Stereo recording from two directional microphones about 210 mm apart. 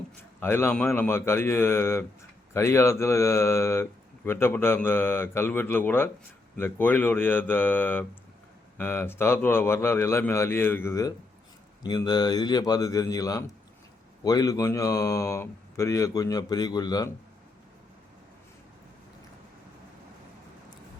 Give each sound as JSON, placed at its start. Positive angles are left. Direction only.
{"t": 0.2, "sound": "speech", "side_deg": 10}